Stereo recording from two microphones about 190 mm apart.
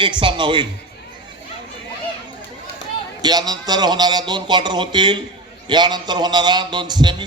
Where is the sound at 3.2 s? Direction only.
20° right (ahead or behind).